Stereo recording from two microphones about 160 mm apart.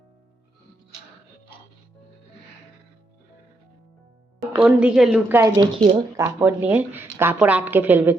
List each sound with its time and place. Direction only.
4.6 s a woman's voice: 5° right (ahead or behind)
5.3 s speech: 20° right (ahead or behind)
5.7 s speech: 35° right (ahead or behind)
6.1 s speech: 15° right (ahead or behind)